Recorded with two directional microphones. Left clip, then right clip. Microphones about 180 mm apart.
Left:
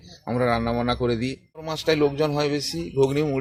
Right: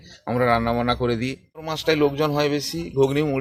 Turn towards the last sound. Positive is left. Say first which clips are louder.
# right 1 dB
turn(degrees=-5)  # may be behind; listen again after turning